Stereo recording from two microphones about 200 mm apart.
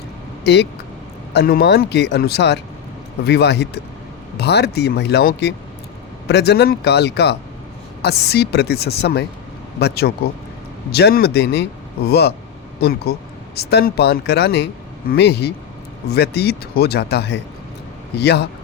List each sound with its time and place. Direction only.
0.4 s speech: 55° left (ahead or behind)